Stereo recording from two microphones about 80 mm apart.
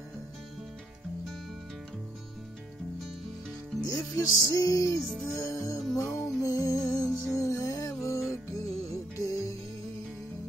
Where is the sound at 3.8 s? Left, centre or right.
Left.